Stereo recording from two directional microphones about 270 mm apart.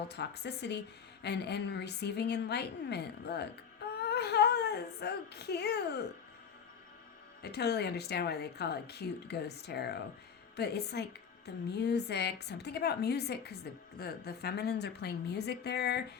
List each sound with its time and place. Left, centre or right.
0.1 s speech: left
7.4 s speech: left